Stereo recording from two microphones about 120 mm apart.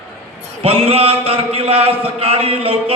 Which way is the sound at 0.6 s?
55° right (ahead or behind).